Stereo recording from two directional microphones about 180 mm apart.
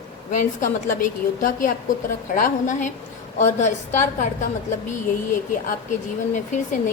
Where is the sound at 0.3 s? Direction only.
45° left (ahead or behind).